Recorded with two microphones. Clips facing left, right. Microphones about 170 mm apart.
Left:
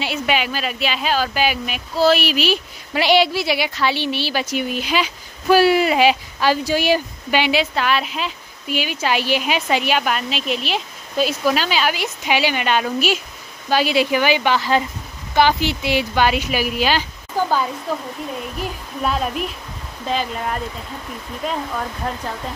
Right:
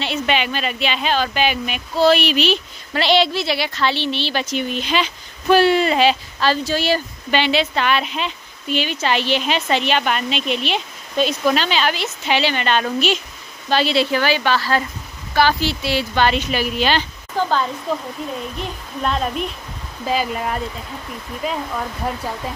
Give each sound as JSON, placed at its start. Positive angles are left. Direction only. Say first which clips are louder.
{"t": 0.0, "sound": "speech", "louder": "even", "side_deg": 5}